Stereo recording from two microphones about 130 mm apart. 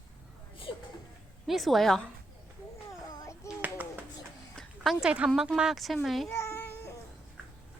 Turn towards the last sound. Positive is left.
turn(degrees=15)  # may be behind; listen again after turning